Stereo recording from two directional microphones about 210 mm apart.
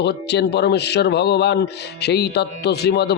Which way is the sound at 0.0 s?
55° left (ahead or behind).